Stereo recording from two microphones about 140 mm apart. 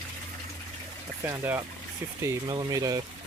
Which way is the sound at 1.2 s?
15° right (ahead or behind).